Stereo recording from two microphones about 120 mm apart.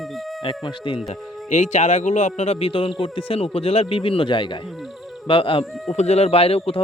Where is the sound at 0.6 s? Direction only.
45° left (ahead or behind).